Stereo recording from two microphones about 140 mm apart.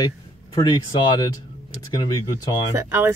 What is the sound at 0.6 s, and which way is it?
Speech, 30° left (ahead or behind).